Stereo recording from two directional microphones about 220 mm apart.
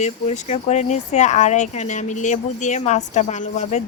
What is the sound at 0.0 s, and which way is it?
Speech, 30° left (ahead or behind).